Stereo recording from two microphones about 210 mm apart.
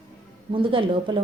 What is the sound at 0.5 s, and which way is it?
Speech, 25° right (ahead or behind).